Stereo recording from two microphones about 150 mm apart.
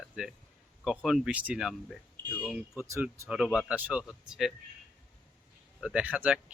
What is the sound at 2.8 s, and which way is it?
Speech, 20° right (ahead or behind).